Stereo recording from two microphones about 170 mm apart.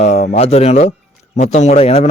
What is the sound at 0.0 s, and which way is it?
A man's voice, 40° left (ahead or behind).